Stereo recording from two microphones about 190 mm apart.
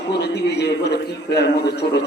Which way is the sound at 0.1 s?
60° left (ahead or behind).